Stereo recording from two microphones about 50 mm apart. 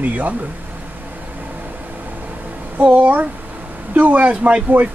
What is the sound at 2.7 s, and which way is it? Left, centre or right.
Speech, right.